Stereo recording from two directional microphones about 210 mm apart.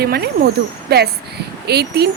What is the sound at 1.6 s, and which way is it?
Speech, 50° right (ahead or behind).